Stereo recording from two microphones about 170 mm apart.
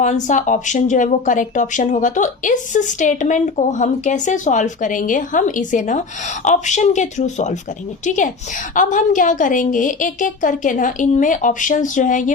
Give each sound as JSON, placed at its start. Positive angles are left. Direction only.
{"t": 0.0, "sound": "speech", "side_deg": 45}